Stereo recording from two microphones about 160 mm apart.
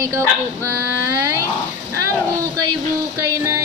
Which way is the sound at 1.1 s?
15° right (ahead or behind).